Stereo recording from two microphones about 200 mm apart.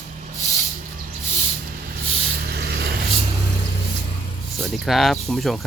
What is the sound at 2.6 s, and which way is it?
Vehicle, 50° right (ahead or behind).